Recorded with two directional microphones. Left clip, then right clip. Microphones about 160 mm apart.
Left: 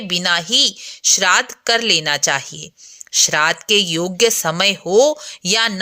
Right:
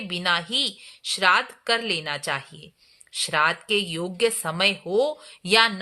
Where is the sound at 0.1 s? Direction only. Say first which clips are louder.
Left 7 dB; 35° left (ahead or behind).